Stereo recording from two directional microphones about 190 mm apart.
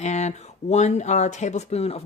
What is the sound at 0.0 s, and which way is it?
Speech, 35° left (ahead or behind).